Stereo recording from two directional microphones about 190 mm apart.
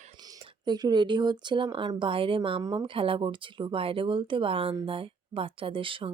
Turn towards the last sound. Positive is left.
turn(degrees=-25)  # may be behind; listen again after turning